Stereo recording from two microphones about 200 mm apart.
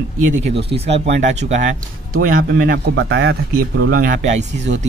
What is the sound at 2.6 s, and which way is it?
Speech, 55° right (ahead or behind).